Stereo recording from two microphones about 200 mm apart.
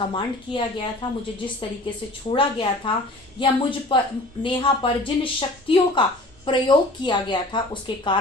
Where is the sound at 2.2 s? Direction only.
25° left (ahead or behind).